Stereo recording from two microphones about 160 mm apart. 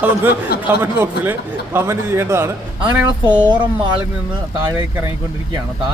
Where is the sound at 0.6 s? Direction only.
15° right (ahead or behind).